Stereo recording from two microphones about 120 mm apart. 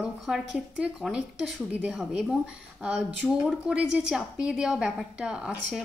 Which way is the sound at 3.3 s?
5° right (ahead or behind).